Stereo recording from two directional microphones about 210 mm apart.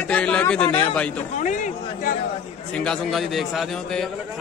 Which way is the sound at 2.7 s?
5° left (ahead or behind).